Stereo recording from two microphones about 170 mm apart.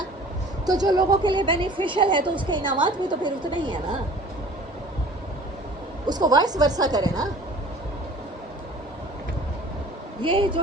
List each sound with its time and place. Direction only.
0.6 s a woman's voice: 20° right (ahead or behind)
6.1 s a woman's voice: 25° right (ahead or behind)
10.2 s a woman's voice: 30° right (ahead or behind)